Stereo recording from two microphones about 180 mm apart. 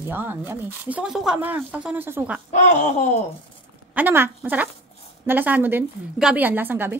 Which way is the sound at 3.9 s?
10° right (ahead or behind).